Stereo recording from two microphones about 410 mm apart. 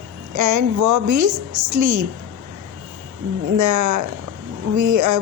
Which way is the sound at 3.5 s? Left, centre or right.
Right.